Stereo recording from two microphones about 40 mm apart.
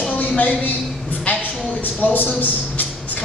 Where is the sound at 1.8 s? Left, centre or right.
Left.